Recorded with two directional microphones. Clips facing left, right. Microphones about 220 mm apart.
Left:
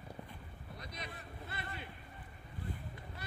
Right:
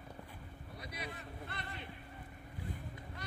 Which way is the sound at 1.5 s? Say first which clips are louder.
Left 4 dB; 5° left (ahead or behind).